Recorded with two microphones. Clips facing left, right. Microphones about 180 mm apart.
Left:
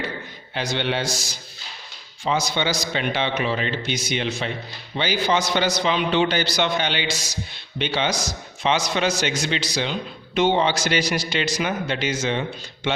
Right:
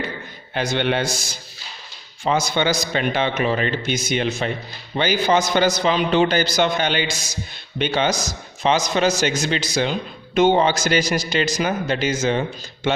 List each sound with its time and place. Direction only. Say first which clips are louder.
0.5 s a man's voice: right 4 dB; 50° right (ahead or behind)